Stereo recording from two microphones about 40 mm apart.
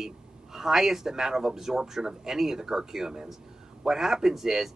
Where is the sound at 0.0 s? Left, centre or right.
Centre.